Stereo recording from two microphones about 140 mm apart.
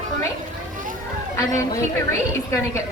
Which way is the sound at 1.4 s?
20° left (ahead or behind).